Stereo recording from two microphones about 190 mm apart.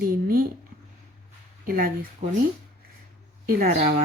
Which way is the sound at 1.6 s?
50° right (ahead or behind).